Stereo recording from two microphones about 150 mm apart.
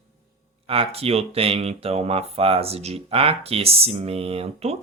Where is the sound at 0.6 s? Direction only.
40° right (ahead or behind).